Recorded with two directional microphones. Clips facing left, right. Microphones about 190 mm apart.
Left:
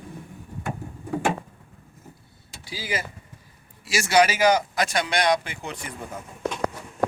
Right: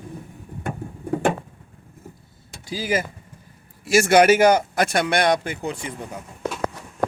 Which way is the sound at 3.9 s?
55° right (ahead or behind).